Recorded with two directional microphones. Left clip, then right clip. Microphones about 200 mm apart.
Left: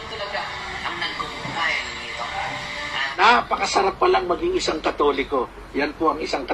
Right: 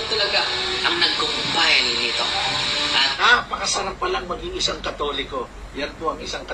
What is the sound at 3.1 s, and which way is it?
A man's voice, 20° left (ahead or behind).